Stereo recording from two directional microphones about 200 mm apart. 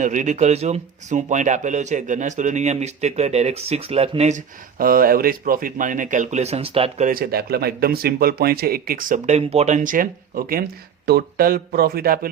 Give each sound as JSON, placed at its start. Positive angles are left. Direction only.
{"t": 0.0, "sound": "speech", "side_deg": -40}
{"t": 7.1, "sound": "speech", "side_deg": -50}